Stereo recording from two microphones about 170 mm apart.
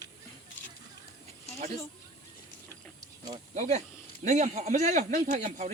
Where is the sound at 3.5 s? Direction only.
45° right (ahead or behind).